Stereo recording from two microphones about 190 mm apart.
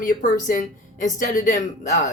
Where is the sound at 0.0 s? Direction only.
45° left (ahead or behind).